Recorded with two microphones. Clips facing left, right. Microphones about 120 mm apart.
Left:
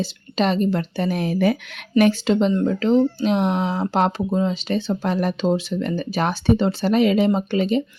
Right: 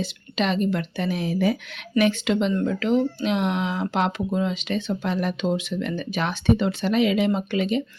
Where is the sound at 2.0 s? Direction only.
35° left (ahead or behind).